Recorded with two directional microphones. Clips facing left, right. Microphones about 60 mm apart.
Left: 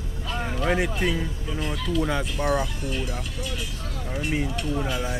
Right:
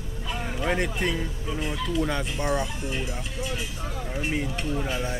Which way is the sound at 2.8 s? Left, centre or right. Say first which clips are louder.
Left 1 dB; right.